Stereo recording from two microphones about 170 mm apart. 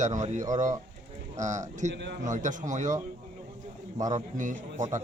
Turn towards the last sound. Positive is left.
turn(degrees=-45)  # may be behind; listen again after turning